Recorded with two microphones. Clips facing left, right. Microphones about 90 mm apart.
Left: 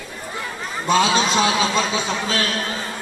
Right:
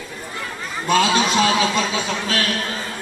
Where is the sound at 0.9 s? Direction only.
20° left (ahead or behind).